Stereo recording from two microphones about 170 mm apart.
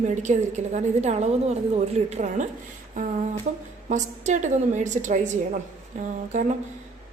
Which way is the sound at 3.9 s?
45° right (ahead or behind).